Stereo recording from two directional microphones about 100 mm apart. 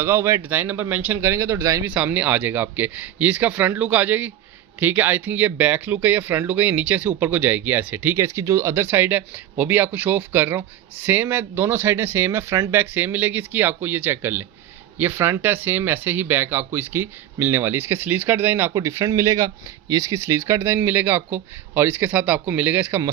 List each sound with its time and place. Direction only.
0.0 s speech: 25° right (ahead or behind)
1.9 s speech: 15° right (ahead or behind)